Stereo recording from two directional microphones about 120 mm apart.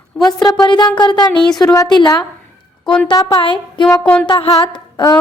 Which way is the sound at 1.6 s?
35° left (ahead or behind).